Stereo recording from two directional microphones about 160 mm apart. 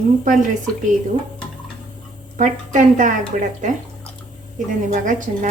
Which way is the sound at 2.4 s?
50° right (ahead or behind).